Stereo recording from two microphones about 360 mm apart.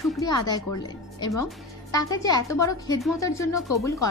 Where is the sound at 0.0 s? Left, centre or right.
Centre.